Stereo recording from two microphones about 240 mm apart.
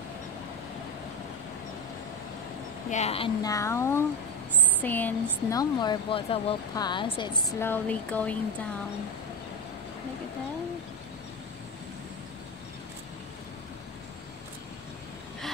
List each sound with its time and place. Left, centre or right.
2.9 s a woman's voice: left
7.6 s speech: centre